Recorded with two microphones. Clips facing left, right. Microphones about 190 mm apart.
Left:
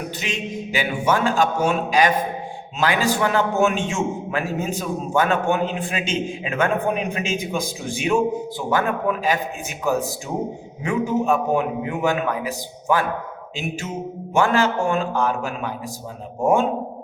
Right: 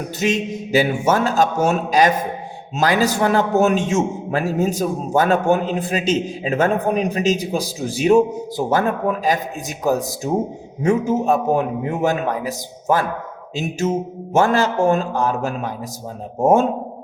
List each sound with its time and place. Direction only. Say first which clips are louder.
0.2 s a man's voice: right 7 dB; 40° right (ahead or behind)